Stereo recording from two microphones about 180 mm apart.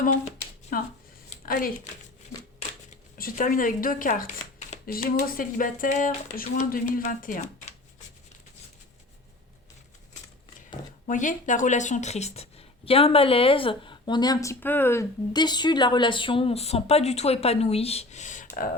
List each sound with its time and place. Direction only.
0.0 s a sound: 45° left (ahead or behind)
1.3 s speech: 50° left (ahead or behind)
3.2 s speech: 50° left (ahead or behind)
11.0 s speech: 45° left (ahead or behind); by 14.5 s 20° left (ahead or behind)
14.6 s speech: 10° left (ahead or behind); by 18.4 s 40° left (ahead or behind)